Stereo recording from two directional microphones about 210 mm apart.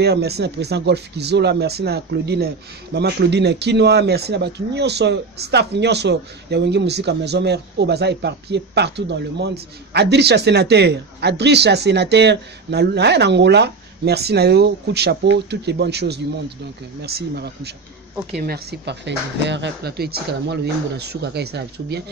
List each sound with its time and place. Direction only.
0.0 s speech: 50° right (ahead or behind)